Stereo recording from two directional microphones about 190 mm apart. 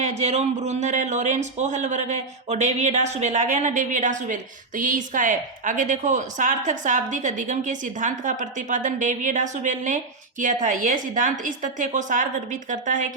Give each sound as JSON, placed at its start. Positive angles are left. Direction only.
{"t": 0.0, "sound": "speech", "side_deg": -35}